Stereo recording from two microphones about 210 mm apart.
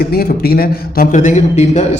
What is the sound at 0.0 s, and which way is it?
A man's voice, 50° left (ahead or behind).